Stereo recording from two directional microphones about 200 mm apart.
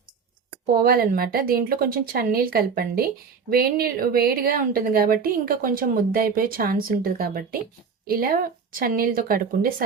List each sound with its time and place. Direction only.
0.8 s a woman's voice: 45° right (ahead or behind)